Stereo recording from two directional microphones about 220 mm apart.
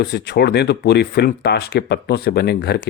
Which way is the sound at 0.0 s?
50° left (ahead or behind).